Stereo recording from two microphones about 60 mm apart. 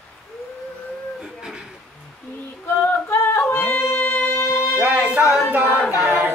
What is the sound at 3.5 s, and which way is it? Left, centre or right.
Music, left.